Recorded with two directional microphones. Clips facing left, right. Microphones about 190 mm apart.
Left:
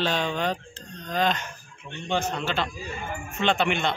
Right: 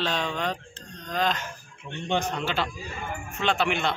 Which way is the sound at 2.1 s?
15° right (ahead or behind).